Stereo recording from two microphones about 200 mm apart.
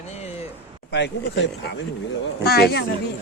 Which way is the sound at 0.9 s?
60° left (ahead or behind).